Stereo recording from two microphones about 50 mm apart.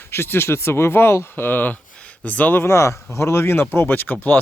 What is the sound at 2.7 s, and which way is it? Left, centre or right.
Speech, left.